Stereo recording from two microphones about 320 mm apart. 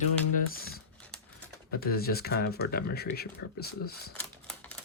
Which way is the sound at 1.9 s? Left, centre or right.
Left.